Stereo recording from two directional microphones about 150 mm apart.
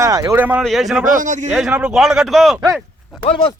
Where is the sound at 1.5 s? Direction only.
Centre (ahead or behind).